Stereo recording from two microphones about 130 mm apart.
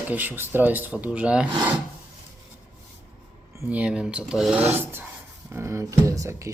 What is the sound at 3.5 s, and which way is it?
Speech, 15° right (ahead or behind).